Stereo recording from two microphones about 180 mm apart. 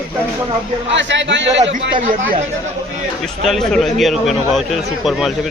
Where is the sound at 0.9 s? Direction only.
90° right.